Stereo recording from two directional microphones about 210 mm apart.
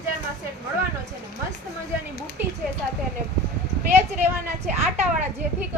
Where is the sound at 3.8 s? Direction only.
10° right (ahead or behind).